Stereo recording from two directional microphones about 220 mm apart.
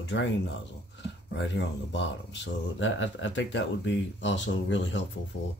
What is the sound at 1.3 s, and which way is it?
Speech, 55° left (ahead or behind).